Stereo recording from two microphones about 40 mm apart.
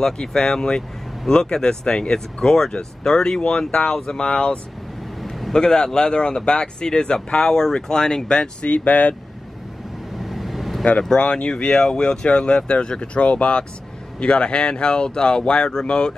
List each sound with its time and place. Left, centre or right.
0.0 s speech: centre
8.6 s speech: left
10.2 s vehicle: centre
11.1 s speech: left